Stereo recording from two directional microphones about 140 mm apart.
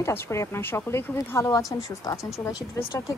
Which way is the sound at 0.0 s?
20° left (ahead or behind).